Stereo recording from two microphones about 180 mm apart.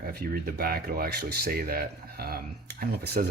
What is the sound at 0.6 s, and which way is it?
Speech, 55° right (ahead or behind).